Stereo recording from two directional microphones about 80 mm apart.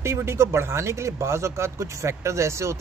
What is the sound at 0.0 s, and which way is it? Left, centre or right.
Speech, right.